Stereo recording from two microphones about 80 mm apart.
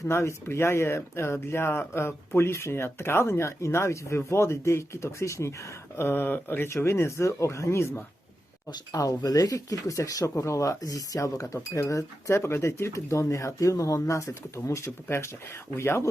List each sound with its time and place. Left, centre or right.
0.1 s speech: left
8.9 s speech: left